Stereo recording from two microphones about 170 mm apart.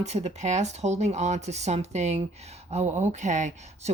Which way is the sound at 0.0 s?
40° right (ahead or behind).